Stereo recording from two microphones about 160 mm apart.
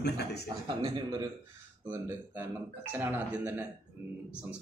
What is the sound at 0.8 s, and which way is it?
A man's voice, 25° right (ahead or behind).